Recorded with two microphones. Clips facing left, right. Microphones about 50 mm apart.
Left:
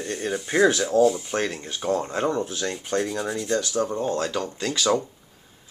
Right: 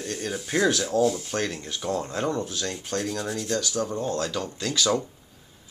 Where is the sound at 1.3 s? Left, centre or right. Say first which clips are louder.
Left 2 dB; left.